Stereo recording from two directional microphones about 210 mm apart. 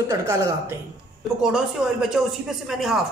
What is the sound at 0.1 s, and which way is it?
Speech, 15° right (ahead or behind).